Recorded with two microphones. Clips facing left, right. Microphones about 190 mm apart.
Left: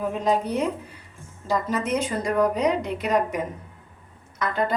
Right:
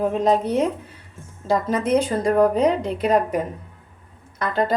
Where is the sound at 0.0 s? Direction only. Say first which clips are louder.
Right 4 dB; 30° right (ahead or behind).